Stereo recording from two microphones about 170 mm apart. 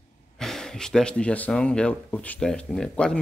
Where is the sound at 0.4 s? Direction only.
5° left (ahead or behind).